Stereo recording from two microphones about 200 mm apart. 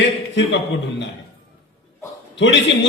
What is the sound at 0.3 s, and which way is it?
Speech, 60° left (ahead or behind).